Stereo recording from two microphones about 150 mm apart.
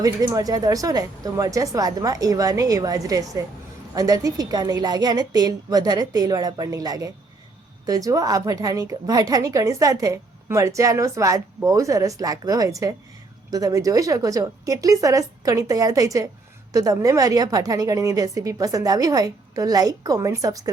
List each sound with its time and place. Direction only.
0.0 s a woman's voice: 25° right (ahead or behind)